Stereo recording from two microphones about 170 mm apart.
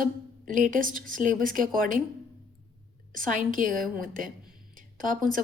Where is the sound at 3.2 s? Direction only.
50° right (ahead or behind).